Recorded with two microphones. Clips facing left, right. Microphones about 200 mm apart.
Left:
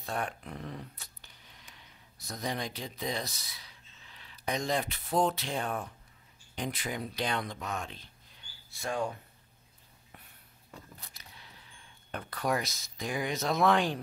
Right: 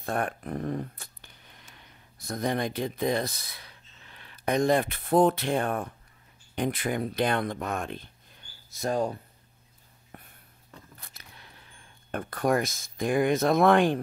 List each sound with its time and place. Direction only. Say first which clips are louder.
0.0 s speech: right 6 dB; 55° right (ahead or behind); by 9.2 s 35° right (ahead or behind)
10.1 s a sound: right 7 dB; 50° right (ahead or behind)
11.0 s speech: right 2 dB; 55° right (ahead or behind)